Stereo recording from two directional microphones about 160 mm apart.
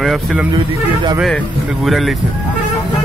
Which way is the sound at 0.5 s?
30° right (ahead or behind).